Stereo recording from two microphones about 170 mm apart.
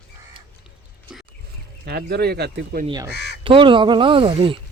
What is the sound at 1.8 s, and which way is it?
Speech, 70° right (ahead or behind).